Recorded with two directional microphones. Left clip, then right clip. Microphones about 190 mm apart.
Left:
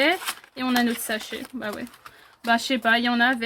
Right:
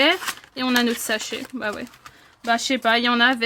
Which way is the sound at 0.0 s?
35° right (ahead or behind).